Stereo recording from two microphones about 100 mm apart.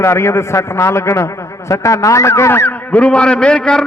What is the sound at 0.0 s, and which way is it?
A man's voice, 25° left (ahead or behind).